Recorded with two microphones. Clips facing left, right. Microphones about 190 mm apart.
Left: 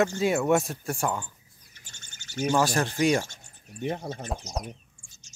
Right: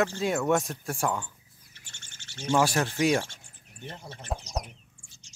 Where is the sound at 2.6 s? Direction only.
5° right (ahead or behind).